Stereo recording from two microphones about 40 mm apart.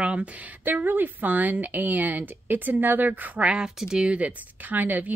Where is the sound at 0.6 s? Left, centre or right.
Right.